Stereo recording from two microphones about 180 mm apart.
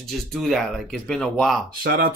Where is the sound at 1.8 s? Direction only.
55° right (ahead or behind).